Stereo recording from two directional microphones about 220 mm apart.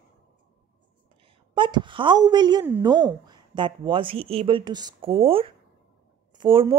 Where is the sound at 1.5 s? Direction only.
20° right (ahead or behind).